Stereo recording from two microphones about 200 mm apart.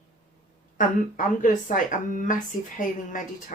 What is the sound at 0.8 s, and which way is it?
Speech, 40° left (ahead or behind).